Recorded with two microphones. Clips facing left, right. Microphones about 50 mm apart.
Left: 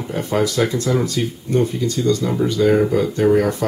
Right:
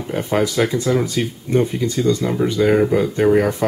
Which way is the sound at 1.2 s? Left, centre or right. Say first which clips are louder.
Right 1 dB; right.